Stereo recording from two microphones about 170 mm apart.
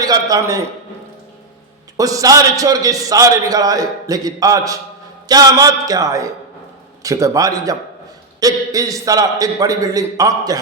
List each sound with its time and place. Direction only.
0.0 s a man's voice: 20° right (ahead or behind)
2.0 s a man's voice: 20° right (ahead or behind)